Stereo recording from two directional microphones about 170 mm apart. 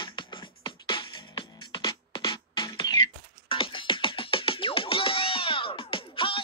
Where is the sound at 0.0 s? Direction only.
25° left (ahead or behind).